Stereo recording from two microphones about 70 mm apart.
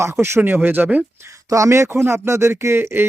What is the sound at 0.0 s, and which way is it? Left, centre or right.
Speech, right.